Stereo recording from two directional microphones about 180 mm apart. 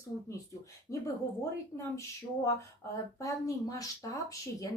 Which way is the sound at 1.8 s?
15° left (ahead or behind).